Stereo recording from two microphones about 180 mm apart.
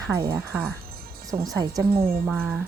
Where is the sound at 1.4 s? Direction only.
20° right (ahead or behind).